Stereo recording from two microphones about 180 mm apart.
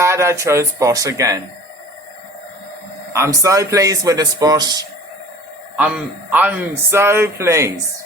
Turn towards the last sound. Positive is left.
turn(degrees=-15)  # may be behind; listen again after turning